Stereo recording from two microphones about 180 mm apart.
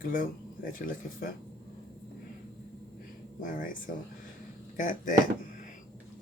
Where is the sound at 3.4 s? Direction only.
50° left (ahead or behind).